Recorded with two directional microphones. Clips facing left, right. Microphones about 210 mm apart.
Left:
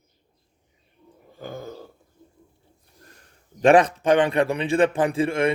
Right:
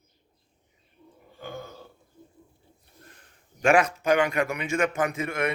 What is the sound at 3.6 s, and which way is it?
A man's voice, 35° left (ahead or behind).